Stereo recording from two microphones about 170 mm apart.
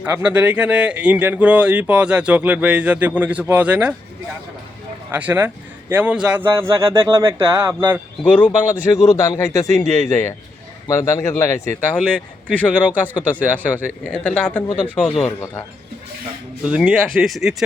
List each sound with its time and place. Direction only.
0.0 s speech: 10° right (ahead or behind)
5.1 s speech: 10° right (ahead or behind)
8.2 s a man's voice: 10° left (ahead or behind)
11.9 s a man's voice: 5° left (ahead or behind)
14.0 s a man's voice: 5° left (ahead or behind)
16.6 s a man's voice: 5° right (ahead or behind)